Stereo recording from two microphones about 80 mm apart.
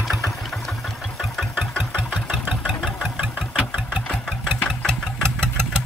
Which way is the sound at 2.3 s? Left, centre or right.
Centre.